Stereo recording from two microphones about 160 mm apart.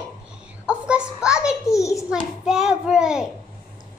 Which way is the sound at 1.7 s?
20° left (ahead or behind).